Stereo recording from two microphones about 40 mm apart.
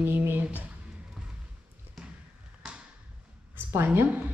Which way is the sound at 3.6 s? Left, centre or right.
Right.